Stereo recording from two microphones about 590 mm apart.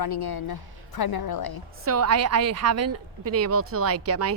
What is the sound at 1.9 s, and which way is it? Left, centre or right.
A woman's voice, right.